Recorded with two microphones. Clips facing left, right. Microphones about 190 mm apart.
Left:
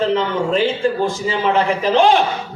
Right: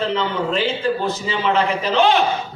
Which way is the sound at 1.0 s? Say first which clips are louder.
Left 3 dB; 50° left (ahead or behind).